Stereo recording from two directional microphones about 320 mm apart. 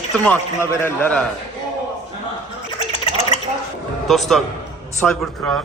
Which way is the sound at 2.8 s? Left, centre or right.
Centre.